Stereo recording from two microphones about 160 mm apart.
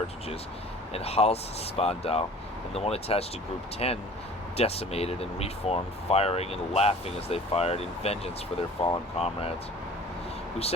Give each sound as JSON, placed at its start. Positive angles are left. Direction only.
{"t": 0.9, "sound": "speech", "side_deg": 40}